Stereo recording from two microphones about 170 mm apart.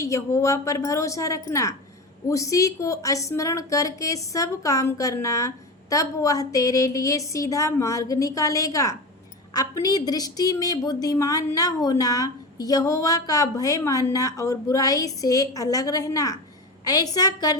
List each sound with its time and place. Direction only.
0.0 s a woman's voice: 20° left (ahead or behind)